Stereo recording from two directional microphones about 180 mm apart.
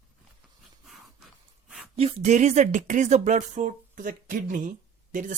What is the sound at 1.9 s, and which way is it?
Speech, 35° right (ahead or behind).